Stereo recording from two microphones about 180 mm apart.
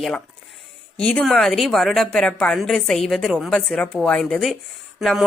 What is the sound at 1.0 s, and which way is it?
A woman's voice, 5° left (ahead or behind).